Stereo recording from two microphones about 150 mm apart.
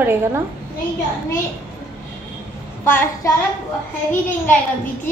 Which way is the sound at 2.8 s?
15° left (ahead or behind).